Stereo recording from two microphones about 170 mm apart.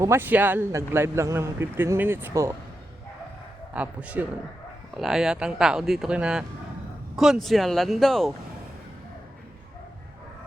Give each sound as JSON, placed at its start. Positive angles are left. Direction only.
{"t": 0.0, "sound": "speech", "side_deg": -15}
{"t": 3.8, "sound": "speech", "side_deg": -10}